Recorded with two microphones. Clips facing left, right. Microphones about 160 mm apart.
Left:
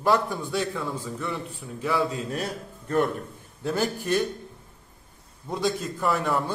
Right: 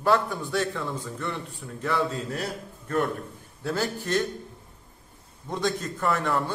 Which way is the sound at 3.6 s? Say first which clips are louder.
Left 2 dB; 15° left (ahead or behind).